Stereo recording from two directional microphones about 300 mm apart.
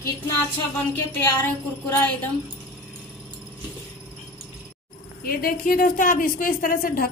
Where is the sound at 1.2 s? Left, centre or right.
Centre.